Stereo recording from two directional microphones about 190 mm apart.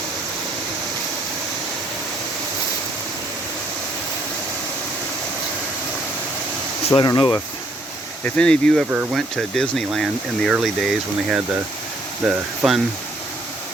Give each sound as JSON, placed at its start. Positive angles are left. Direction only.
{"t": 6.8, "sound": "speech", "side_deg": 25}
{"t": 8.2, "sound": "speech", "side_deg": 5}